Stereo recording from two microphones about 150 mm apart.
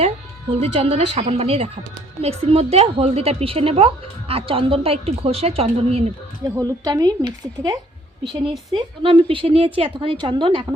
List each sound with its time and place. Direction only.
0.5 s a woman's voice: 45° right (ahead or behind)
6.5 s a woman's voice: 25° right (ahead or behind)